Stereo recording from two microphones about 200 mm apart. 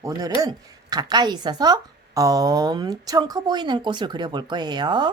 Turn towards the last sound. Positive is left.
turn(degrees=-20)  # may be behind; listen again after turning